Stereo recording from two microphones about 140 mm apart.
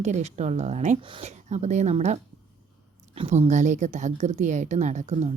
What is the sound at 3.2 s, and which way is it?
A woman's voice, 55° right (ahead or behind).